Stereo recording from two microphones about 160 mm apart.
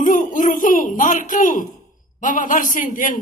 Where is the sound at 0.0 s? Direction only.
55° left (ahead or behind).